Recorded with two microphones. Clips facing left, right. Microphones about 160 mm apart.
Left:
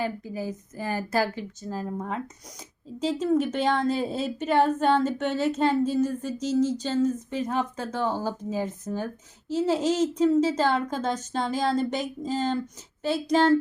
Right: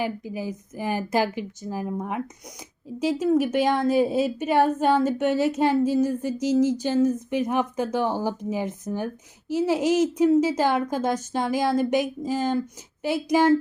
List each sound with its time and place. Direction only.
0.0 s a woman's voice: 15° right (ahead or behind)
3.0 s a woman's voice: 10° right (ahead or behind)